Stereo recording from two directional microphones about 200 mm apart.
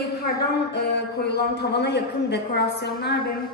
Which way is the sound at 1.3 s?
55° left (ahead or behind).